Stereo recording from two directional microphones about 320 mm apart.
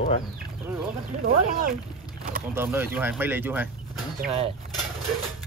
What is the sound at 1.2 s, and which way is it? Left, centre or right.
Speech, right.